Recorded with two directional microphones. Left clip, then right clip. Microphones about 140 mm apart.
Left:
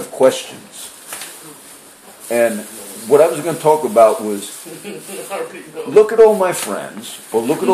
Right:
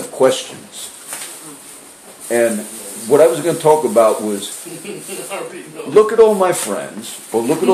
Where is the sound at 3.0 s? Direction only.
15° right (ahead or behind).